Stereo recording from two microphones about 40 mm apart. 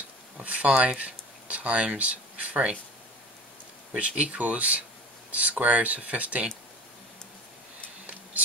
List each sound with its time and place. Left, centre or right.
0.4 s speech: right
3.9 s speech: right